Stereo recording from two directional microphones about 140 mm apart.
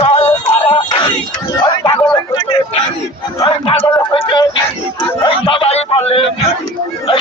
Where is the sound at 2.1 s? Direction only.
40° left (ahead or behind).